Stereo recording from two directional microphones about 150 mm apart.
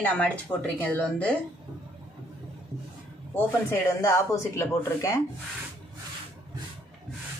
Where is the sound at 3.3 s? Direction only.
15° left (ahead or behind).